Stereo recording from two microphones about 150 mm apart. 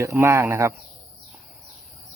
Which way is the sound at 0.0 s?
20° right (ahead or behind).